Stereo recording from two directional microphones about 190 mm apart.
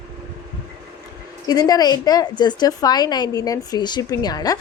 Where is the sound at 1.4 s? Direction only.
20° left (ahead or behind).